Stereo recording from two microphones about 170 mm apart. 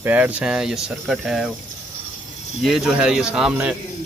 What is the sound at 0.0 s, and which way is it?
Speech, 10° right (ahead or behind).